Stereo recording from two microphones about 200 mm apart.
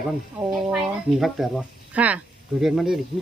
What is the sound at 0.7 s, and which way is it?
Speech, centre (ahead or behind).